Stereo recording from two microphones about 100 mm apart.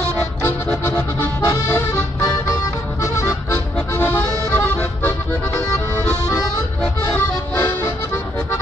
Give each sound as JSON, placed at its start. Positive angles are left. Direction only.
{"t": 1.2, "sound": "music", "side_deg": 25}
{"t": 3.5, "sound": "music", "side_deg": 15}
{"t": 6.8, "sound": "music", "side_deg": 15}